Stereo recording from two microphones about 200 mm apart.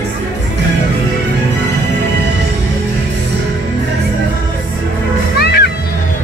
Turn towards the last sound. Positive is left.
turn(degrees=55)  # may be behind; listen again after turning